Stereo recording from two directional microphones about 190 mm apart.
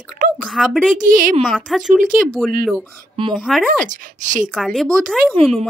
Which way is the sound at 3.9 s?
45° right (ahead or behind).